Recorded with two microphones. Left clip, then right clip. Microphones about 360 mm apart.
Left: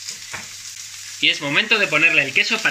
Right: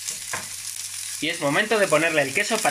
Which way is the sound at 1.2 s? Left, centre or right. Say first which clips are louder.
Left 5 dB; centre.